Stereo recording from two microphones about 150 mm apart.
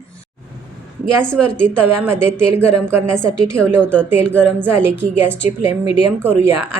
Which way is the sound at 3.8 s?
10° left (ahead or behind).